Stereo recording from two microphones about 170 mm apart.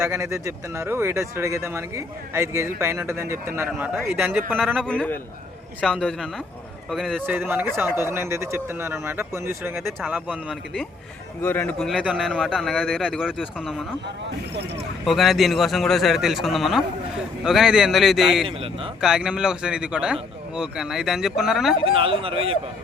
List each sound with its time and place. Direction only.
0.0 s speech: 15° right (ahead or behind)
4.8 s a man's voice: 5° left (ahead or behind); by 10.6 s 10° right (ahead or behind)
11.4 s a man's voice: 10° left (ahead or behind)
15.0 s a man's voice: centre (ahead or behind)
18.4 s speech: 30° right (ahead or behind)
19.0 s a man's voice: 5° right (ahead or behind)
21.9 s speech: 30° right (ahead or behind)